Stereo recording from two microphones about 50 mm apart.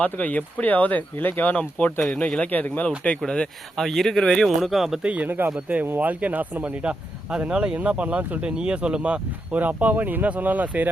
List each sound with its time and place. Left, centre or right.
0.0 s speech: left
2.4 s speech: left
3.2 s speech: left
3.8 s speech: centre
4.4 s speech: centre
5.0 s speech: right
6.8 s speech: centre; by 10.8 s right